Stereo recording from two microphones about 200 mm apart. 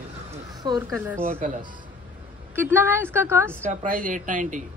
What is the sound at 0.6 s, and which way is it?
Speech, 20° right (ahead or behind).